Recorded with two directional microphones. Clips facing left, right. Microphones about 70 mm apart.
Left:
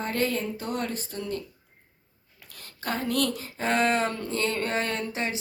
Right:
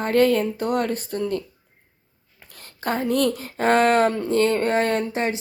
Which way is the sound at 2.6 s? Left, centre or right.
Right.